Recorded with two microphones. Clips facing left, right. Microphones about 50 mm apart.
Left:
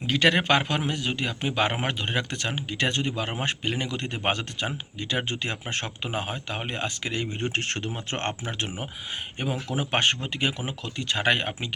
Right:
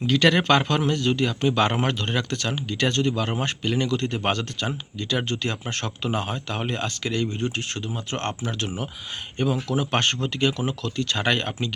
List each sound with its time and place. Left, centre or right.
0.1 s a man's voice: centre
6.1 s speech: centre
7.3 s a man's voice: left; by 11.7 s centre